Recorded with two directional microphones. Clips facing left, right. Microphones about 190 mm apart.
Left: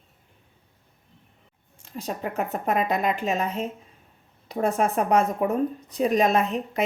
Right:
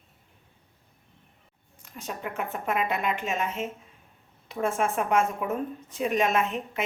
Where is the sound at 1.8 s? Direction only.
35° left (ahead or behind).